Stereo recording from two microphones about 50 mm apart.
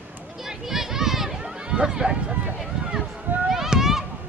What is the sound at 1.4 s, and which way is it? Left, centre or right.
Run, centre.